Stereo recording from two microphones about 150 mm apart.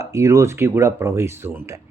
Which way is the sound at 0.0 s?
20° right (ahead or behind).